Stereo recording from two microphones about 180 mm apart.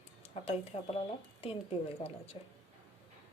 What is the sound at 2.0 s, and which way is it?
Speech, 35° left (ahead or behind).